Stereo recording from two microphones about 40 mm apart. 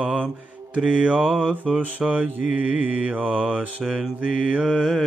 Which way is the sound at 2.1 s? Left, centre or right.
Right.